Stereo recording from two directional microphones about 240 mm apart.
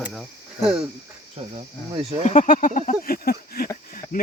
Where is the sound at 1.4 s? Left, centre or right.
Right.